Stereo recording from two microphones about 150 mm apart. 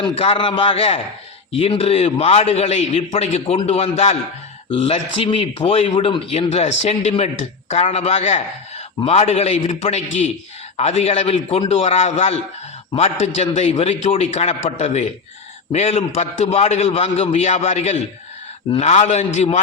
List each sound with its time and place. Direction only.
0.0 s a man's voice: 35° left (ahead or behind)